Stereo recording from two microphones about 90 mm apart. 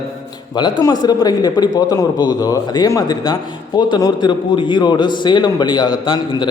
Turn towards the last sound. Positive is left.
turn(degrees=60)  # may be behind; listen again after turning